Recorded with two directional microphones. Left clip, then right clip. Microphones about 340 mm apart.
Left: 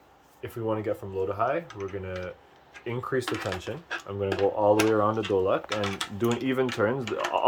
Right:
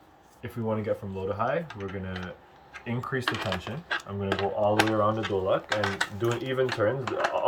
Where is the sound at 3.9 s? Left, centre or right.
Centre.